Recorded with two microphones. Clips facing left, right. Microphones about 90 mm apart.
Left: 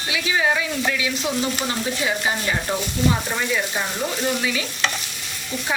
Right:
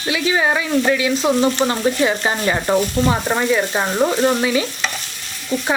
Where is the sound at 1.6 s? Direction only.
50° right (ahead or behind).